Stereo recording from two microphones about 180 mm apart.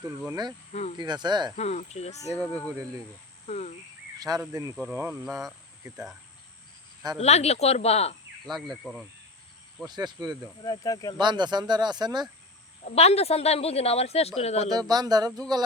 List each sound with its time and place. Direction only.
0.3 s speech: 20° right (ahead or behind)
0.7 s speech: 40° left (ahead or behind)
0.9 s speech: 25° right (ahead or behind)
1.5 s a woman's voice: 40° left (ahead or behind)
2.4 s speech: 10° left (ahead or behind)
3.4 s cricket: 40° left (ahead or behind)
4.4 s speech: 15° right (ahead or behind)
7.2 s a woman's voice: 35° left (ahead or behind)
8.4 s speech: centre (ahead or behind)
9.8 s speech: 20° right (ahead or behind)
10.6 s speech: 20° left (ahead or behind)
11.2 s speech: 25° right (ahead or behind)
12.8 s a woman's voice: 35° left (ahead or behind)
14.7 s speech: 20° right (ahead or behind)